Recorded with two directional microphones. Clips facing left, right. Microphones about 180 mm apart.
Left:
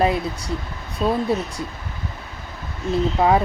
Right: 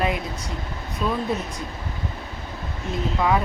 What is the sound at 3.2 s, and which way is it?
Speech, 35° left (ahead or behind).